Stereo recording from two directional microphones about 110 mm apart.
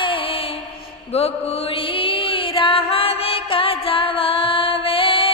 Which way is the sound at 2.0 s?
55° left (ahead or behind).